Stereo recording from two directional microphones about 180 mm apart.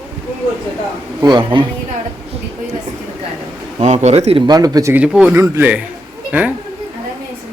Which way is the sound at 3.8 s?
40° right (ahead or behind).